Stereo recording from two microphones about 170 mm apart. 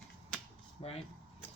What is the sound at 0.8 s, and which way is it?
Speech, 35° left (ahead or behind).